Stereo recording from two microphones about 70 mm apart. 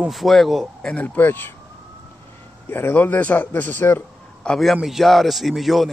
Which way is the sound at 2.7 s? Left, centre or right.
Left.